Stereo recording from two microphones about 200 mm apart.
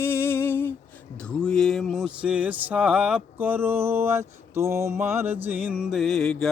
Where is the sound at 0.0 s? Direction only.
10° left (ahead or behind).